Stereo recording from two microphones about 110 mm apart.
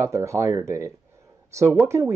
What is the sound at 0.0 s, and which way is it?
Speech, 25° right (ahead or behind).